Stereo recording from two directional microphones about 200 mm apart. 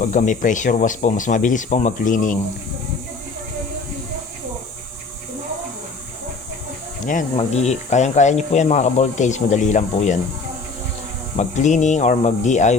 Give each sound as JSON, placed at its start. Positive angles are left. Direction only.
{"t": 0.0, "sound": "speech", "side_deg": 40}
{"t": 7.0, "sound": "speech", "side_deg": 40}
{"t": 11.3, "sound": "speech", "side_deg": 35}